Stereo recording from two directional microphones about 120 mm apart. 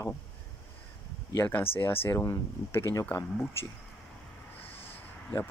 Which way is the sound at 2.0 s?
20° left (ahead or behind).